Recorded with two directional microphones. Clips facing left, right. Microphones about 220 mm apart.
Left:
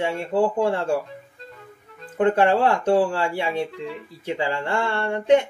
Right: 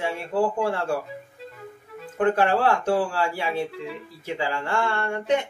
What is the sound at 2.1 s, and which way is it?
Speech, 25° left (ahead or behind).